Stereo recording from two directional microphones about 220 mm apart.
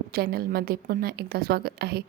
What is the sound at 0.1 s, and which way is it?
Speech, 45° right (ahead or behind).